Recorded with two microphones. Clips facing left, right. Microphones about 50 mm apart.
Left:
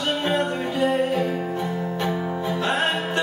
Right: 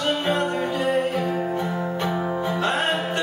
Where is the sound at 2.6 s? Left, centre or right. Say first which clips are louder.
Left 1 dB; centre.